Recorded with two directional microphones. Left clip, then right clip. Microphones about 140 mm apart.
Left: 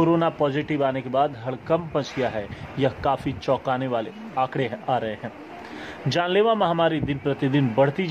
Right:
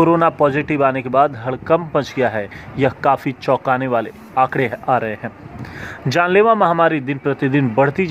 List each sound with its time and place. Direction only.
0.0 s a man's voice: 60° right (ahead or behind)